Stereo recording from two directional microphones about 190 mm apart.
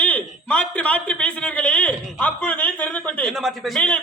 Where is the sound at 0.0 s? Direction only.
5° left (ahead or behind).